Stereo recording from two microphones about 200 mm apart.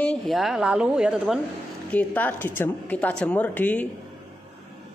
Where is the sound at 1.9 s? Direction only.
10° left (ahead or behind).